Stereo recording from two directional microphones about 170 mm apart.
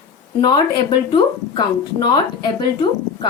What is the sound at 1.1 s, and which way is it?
A woman's voice, 25° left (ahead or behind).